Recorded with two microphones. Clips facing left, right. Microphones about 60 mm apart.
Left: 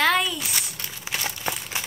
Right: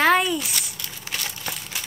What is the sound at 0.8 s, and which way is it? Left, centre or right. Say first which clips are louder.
Crumpling: left 2 dB; centre.